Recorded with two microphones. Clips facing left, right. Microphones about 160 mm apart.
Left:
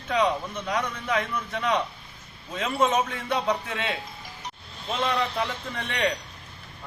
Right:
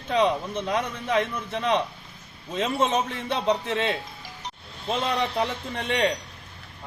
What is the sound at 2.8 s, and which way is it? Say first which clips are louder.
Speech: left 5 dB; 25° right (ahead or behind).